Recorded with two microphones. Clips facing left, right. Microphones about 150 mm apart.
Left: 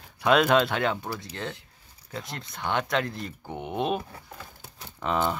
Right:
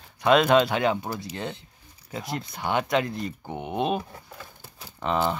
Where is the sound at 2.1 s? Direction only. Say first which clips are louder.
Right 5 dB; 5° right (ahead or behind).